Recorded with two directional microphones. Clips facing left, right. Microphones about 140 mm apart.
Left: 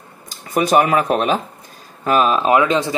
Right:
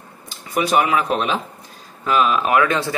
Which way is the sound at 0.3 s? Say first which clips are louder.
Left 3 dB; 45° left (ahead or behind).